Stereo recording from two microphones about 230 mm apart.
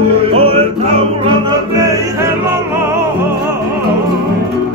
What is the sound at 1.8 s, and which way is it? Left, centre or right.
Music, centre.